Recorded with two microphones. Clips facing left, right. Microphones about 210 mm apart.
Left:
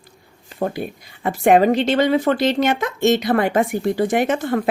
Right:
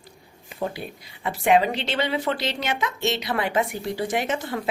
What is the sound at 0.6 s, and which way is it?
A woman's voice, 50° left (ahead or behind).